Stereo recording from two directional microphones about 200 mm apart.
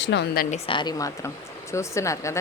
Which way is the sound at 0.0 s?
60° left (ahead or behind).